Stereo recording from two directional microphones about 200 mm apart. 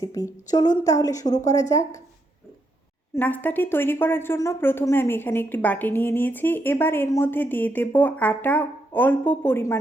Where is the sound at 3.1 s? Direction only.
10° left (ahead or behind).